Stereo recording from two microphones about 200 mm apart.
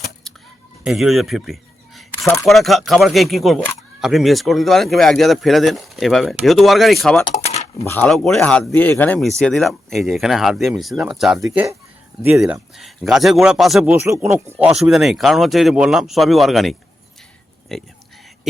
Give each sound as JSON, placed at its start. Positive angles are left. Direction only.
{"t": 0.9, "sound": "speech", "side_deg": 0}
{"t": 2.2, "sound": "speech", "side_deg": 15}
{"t": 2.5, "sound": "speech", "side_deg": 0}
{"t": 7.3, "sound": "a sound", "side_deg": 30}
{"t": 7.9, "sound": "speech", "side_deg": 5}
{"t": 13.9, "sound": "speech", "side_deg": -10}